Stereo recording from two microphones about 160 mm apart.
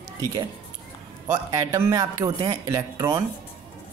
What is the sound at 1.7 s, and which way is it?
Speech, 20° right (ahead or behind).